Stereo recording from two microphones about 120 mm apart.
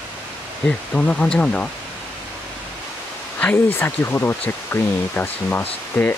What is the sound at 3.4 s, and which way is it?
Speech, 20° left (ahead or behind).